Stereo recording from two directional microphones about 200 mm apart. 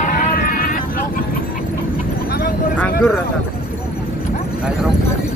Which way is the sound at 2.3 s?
50° left (ahead or behind).